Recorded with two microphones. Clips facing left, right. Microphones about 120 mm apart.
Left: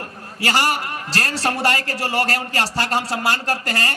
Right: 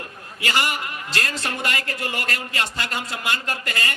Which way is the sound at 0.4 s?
35° left (ahead or behind).